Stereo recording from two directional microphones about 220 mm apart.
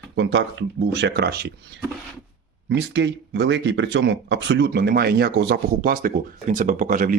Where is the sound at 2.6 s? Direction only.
55° right (ahead or behind).